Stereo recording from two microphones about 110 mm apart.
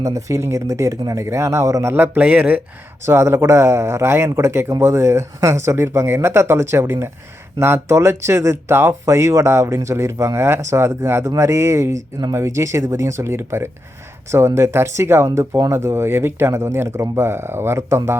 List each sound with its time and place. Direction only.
0.0 s speech: 30° right (ahead or behind); by 2.6 s 15° right (ahead or behind)
3.1 s speech: 25° right (ahead or behind)